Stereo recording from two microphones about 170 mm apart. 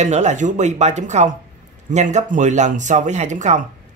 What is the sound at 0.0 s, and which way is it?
Speech, 45° right (ahead or behind).